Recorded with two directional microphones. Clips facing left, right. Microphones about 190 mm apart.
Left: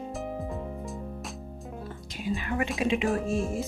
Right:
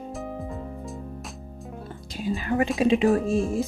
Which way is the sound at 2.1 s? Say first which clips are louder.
Right 5 dB; 35° right (ahead or behind).